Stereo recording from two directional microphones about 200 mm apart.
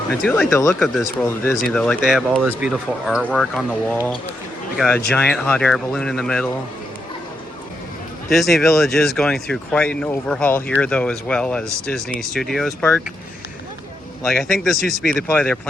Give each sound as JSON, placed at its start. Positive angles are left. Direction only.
{"t": 0.2, "sound": "speech", "side_deg": 5}
{"t": 5.1, "sound": "speech", "side_deg": 5}
{"t": 8.3, "sound": "speech", "side_deg": 0}
{"t": 14.3, "sound": "speech", "side_deg": 0}